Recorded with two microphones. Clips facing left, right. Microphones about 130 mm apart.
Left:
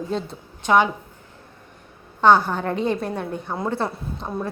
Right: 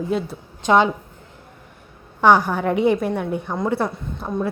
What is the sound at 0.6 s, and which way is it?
Speech, 20° right (ahead or behind).